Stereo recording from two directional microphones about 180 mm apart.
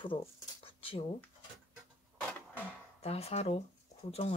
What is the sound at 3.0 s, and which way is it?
Speech, 35° left (ahead or behind).